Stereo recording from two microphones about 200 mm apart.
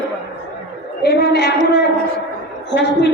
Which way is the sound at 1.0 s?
55° left (ahead or behind).